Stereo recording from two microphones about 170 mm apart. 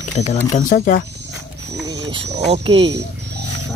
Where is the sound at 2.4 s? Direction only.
35° right (ahead or behind).